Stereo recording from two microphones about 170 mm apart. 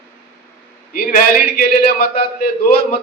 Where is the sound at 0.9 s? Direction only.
60° left (ahead or behind).